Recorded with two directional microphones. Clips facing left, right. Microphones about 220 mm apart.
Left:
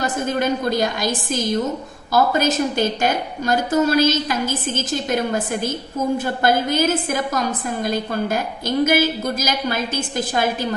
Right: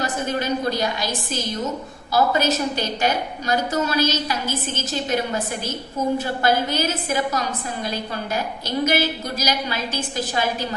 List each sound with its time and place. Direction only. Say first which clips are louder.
0.0 s a woman's voice: left 3 dB; 50° left (ahead or behind)